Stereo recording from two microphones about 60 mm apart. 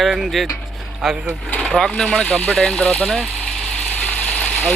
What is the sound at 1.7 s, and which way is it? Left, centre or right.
Speech, centre.